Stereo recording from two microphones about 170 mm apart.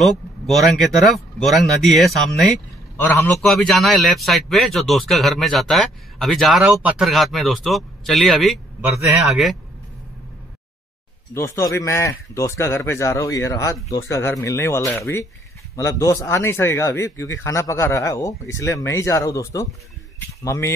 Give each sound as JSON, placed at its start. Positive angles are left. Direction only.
{"t": 0.0, "sound": "speech", "side_deg": 0}
{"t": 3.0, "sound": "speech", "side_deg": 10}
{"t": 11.3, "sound": "speech", "side_deg": 15}